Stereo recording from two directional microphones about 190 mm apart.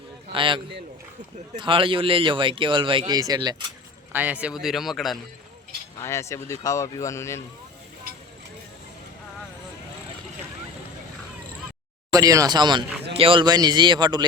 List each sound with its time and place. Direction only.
0.3 s speech: 25° right (ahead or behind)
4.1 s a man's voice: 10° right (ahead or behind)
6.0 s speech: 15° left (ahead or behind)
12.1 s speech: 20° right (ahead or behind)